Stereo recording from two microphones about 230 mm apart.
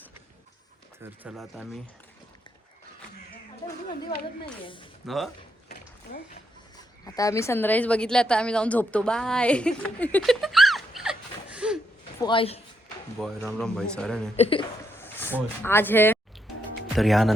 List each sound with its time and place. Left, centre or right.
0.9 s speech: centre
4.6 s a man's voice: left
5.0 s speech: centre
7.0 s speech: centre
12.2 s a man's voice: left
13.1 s speech: centre
14.3 s a man's voice: left
15.0 s speech: centre